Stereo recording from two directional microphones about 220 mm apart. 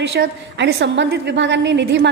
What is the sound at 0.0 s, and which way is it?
A woman's voice, 50° right (ahead or behind).